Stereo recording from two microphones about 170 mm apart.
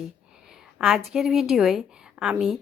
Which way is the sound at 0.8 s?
5° right (ahead or behind).